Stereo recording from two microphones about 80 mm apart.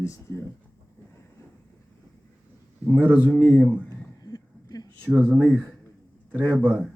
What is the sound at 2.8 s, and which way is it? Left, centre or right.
A man's voice, left.